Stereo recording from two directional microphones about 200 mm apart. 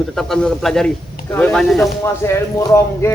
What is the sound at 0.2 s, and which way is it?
Speech, centre (ahead or behind).